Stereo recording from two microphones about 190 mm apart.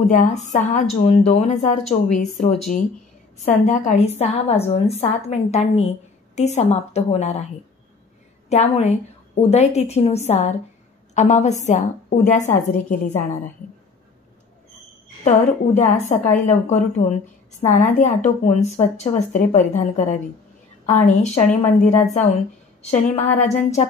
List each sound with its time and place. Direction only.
0.0 s a woman's voice: 40° left (ahead or behind)
8.5 s a woman's voice: 35° left (ahead or behind)
15.2 s a woman's voice: 40° left (ahead or behind)